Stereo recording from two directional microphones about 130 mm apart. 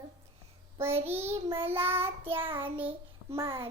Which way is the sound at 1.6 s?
15° right (ahead or behind).